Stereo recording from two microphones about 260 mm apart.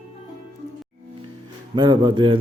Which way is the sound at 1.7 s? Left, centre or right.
Centre.